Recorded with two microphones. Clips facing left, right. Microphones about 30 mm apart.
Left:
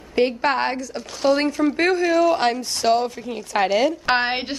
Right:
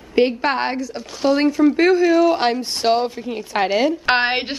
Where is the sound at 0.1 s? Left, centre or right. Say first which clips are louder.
Right 2 dB; centre.